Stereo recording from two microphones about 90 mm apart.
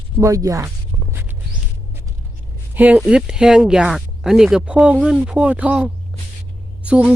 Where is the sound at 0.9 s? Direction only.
35° right (ahead or behind).